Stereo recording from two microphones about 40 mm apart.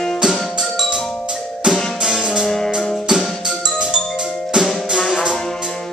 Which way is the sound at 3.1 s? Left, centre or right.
Centre.